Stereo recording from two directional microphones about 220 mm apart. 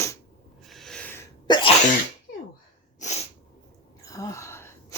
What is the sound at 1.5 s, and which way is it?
Sneeze, 20° left (ahead or behind).